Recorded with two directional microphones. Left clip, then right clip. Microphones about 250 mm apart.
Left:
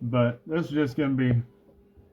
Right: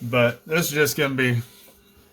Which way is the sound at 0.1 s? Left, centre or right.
Right.